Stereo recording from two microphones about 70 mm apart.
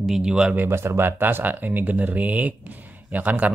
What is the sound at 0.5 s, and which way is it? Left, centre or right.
A man's voice, right.